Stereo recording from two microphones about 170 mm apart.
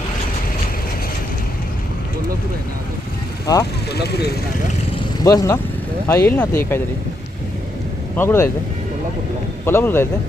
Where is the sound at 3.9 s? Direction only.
70° left (ahead or behind).